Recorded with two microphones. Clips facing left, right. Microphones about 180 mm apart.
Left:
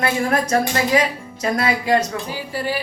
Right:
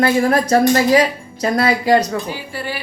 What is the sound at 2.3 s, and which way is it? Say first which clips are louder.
Speech: left 2 dB; 40° left (ahead or behind).